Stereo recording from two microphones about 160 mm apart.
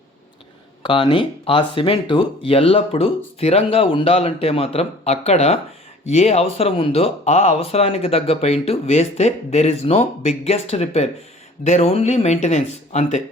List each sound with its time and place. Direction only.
0.8 s speech: 30° left (ahead or behind); by 13.2 s 50° left (ahead or behind)